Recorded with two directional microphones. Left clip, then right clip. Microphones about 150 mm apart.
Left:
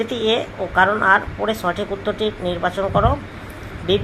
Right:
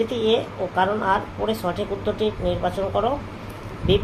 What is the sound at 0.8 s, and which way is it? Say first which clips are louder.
Speech: left 6 dB; 30° left (ahead or behind).